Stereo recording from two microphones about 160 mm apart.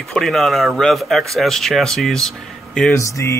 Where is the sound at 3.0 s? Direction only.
20° left (ahead or behind).